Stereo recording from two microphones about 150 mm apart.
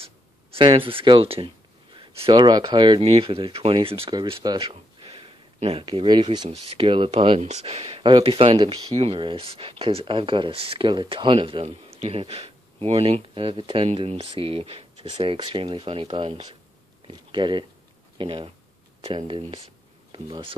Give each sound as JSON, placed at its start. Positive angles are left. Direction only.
{"t": 0.6, "sound": "speech", "side_deg": -35}
{"t": 6.5, "sound": "speech", "side_deg": -40}